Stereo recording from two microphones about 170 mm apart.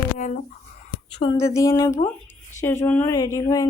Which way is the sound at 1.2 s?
25° left (ahead or behind).